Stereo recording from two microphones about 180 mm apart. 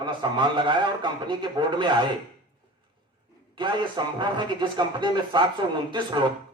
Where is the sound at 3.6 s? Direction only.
25° right (ahead or behind).